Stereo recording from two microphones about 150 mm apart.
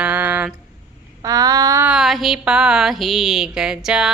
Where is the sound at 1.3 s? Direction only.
25° right (ahead or behind).